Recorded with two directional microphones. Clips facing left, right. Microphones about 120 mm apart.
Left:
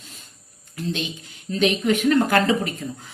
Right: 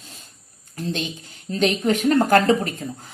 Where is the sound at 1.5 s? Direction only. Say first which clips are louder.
Even; 40° right (ahead or behind).